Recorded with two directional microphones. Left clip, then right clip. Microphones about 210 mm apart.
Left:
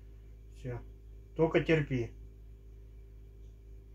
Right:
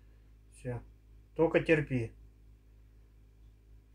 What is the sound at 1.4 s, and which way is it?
Speech, 55° right (ahead or behind).